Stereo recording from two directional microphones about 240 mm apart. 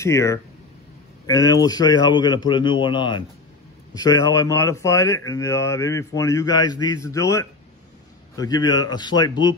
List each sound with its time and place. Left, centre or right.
0.0 s speech: centre